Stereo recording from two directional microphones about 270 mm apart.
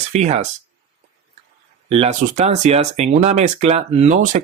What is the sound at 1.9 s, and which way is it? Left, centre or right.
Speech, right.